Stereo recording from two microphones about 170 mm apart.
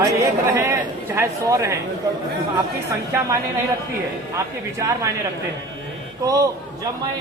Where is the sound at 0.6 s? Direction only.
15° right (ahead or behind).